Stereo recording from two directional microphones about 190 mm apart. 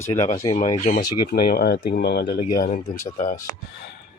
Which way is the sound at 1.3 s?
55° left (ahead or behind).